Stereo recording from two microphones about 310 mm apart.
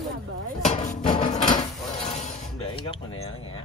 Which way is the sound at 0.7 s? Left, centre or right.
Left.